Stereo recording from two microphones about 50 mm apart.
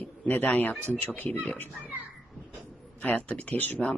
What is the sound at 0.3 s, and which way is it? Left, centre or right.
Speech, left.